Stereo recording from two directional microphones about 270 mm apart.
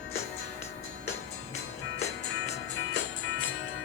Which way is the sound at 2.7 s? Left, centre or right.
Left.